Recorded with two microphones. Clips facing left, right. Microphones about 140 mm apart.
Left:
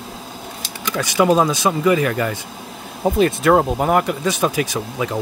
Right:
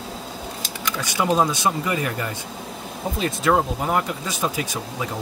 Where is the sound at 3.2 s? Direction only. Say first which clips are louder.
Left 5 dB; 60° left (ahead or behind).